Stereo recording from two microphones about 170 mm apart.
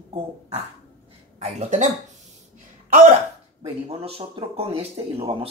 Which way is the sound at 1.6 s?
45° right (ahead or behind).